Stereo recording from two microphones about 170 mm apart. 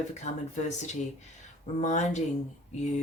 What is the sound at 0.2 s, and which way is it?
Speech, 45° left (ahead or behind).